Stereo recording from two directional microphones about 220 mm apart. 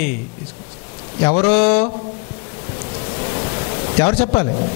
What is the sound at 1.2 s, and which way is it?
Speech, 25° left (ahead or behind).